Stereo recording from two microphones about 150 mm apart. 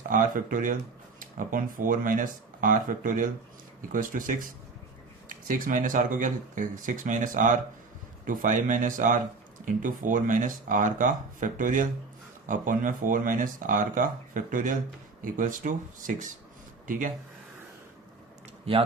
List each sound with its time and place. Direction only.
0.1 s speech: 65° right (ahead or behind)
5.5 s speech: 65° right (ahead or behind)
18.7 s speech: 40° right (ahead or behind)